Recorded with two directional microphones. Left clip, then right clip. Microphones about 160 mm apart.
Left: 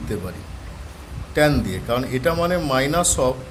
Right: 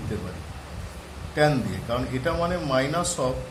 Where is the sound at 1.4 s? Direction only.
60° left (ahead or behind).